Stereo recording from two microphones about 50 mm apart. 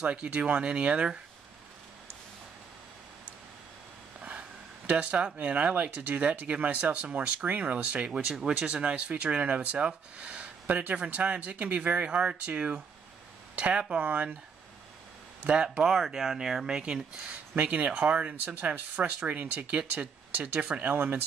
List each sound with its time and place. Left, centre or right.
0.0 s speech: right
4.2 s speech: right
8.3 s speech: centre; by 14.3 s right
15.4 s speech: right
16.8 s speech: right
18.3 s speech: right
20.5 s speech: right
20.8 s speech: right